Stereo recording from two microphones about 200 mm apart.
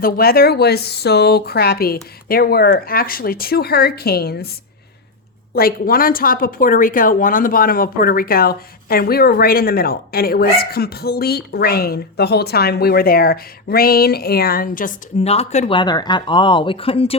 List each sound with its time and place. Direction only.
0.0 s a woman's voice: 50° left (ahead or behind)
5.5 s a woman's voice: 45° left (ahead or behind); by 17.2 s 30° left (ahead or behind)